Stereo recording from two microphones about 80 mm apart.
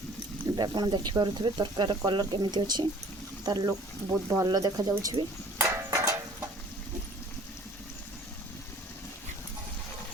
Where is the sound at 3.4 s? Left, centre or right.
Right.